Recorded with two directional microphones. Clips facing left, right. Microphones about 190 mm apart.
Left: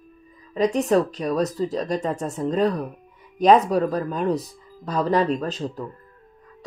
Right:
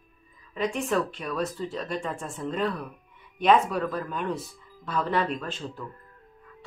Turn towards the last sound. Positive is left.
turn(degrees=40)  # may be behind; listen again after turning